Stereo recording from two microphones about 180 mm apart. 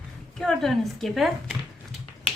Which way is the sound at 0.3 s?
Centre (ahead or behind).